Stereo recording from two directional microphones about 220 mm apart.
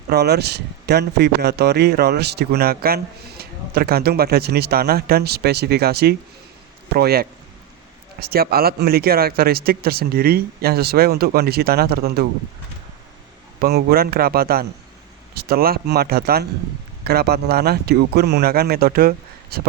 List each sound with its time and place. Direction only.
0.1 s speech: 45° right (ahead or behind)
13.6 s speech: 45° right (ahead or behind)